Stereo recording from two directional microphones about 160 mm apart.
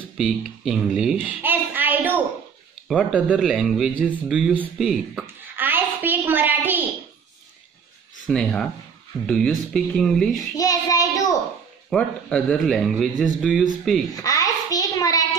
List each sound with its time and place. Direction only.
0.2 s a child's voice: 5° right (ahead or behind)
5.2 s a sound: 10° right (ahead or behind)
8.3 s speech: 5° left (ahead or behind)
10.5 s child singing: 20° left (ahead or behind)
11.9 s speech: 5° left (ahead or behind)
14.2 s child singing: 20° left (ahead or behind)